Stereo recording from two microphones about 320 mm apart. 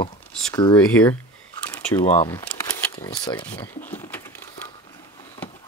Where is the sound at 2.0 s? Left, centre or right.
Centre.